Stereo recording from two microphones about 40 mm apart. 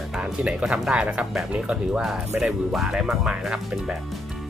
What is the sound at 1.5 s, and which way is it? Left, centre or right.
Speech, right.